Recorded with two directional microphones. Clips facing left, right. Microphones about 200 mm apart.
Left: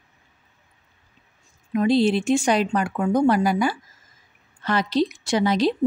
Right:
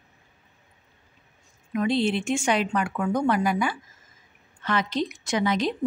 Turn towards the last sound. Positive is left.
turn(degrees=35)  # may be behind; listen again after turning